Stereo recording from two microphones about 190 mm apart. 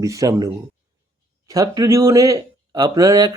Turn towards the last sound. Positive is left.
turn(degrees=-20)  # may be behind; listen again after turning